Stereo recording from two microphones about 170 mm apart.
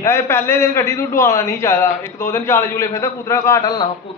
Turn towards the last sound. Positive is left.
turn(degrees=20)  # may be behind; listen again after turning